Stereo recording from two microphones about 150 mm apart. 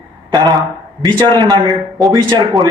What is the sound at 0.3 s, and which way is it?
A man's voice, 30° right (ahead or behind).